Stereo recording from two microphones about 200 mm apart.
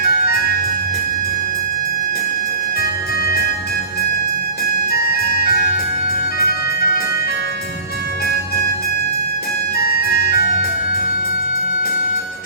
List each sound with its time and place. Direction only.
0.1 s organ: 50° left (ahead or behind)
2.8 s music: 50° left (ahead or behind)
9.7 s music: 50° left (ahead or behind)